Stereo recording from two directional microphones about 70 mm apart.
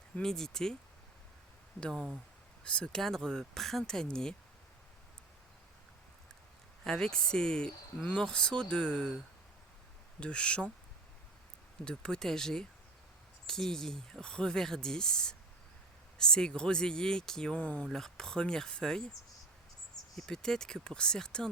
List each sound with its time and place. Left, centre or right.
0.2 s speech: centre
1.9 s speech: centre
2.6 s speech: centre
6.8 s speech: centre
10.2 s speech: centre
11.9 s speech: centre
17.8 s speech: centre
20.1 s speech: centre